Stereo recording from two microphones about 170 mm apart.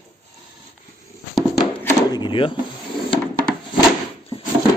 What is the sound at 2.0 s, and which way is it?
Speech, 25° left (ahead or behind).